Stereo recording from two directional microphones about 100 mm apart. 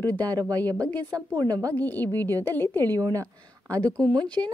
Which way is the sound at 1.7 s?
20° left (ahead or behind).